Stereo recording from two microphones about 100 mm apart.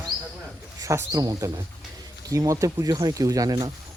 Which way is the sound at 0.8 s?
35° right (ahead or behind).